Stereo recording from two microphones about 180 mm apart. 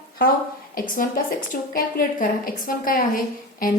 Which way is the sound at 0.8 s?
50° left (ahead or behind).